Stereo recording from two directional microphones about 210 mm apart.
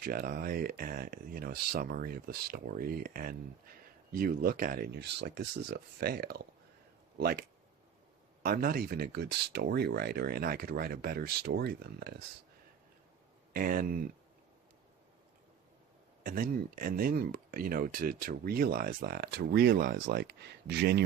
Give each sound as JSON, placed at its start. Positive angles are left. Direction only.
{"t": 0.0, "sound": "speech", "side_deg": -45}
{"t": 8.4, "sound": "speech", "side_deg": -45}
{"t": 13.5, "sound": "speech", "side_deg": -45}
{"t": 16.2, "sound": "speech", "side_deg": -40}